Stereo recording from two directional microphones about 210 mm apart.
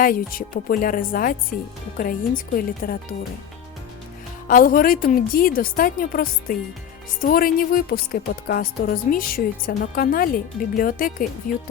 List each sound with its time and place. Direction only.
0.0 s a woman's voice: 40° left (ahead or behind)
4.4 s a woman's voice: 40° left (ahead or behind)